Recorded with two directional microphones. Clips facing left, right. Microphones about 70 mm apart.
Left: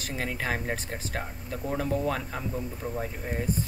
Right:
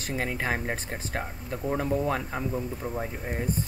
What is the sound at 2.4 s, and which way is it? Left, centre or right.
Speech, centre.